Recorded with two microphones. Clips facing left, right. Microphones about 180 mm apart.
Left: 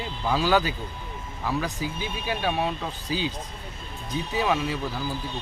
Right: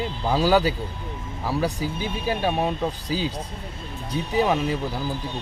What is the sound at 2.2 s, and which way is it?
Speech, 40° right (ahead or behind).